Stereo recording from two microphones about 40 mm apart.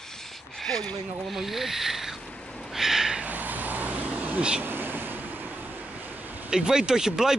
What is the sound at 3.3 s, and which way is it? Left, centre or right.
Vehicle, right.